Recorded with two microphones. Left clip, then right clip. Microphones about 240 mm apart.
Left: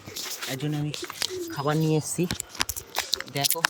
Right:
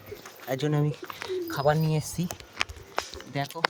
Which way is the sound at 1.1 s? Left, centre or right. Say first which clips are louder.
Left 5 dB; left.